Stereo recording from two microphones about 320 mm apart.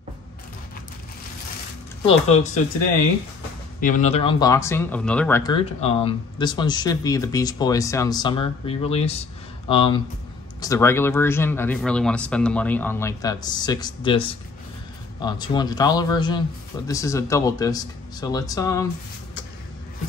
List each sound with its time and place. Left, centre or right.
2.0 s speech: centre
3.8 s speech: left